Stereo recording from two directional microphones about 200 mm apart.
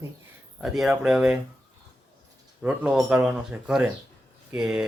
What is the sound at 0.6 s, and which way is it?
Speech, centre (ahead or behind).